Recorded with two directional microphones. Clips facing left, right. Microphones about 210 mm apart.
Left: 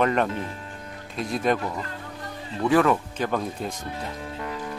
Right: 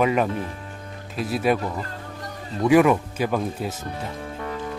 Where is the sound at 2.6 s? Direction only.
10° right (ahead or behind).